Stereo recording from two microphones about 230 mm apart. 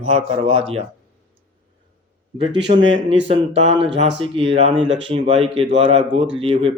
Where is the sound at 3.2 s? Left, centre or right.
Right.